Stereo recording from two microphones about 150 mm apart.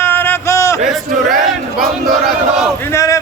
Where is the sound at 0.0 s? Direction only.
15° left (ahead or behind).